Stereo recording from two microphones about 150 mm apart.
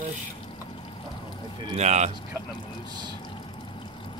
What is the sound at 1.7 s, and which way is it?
Speech, 50° right (ahead or behind).